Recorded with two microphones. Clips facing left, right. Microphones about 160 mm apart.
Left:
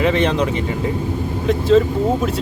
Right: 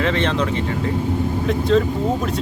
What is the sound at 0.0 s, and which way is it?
Speech, 10° left (ahead or behind).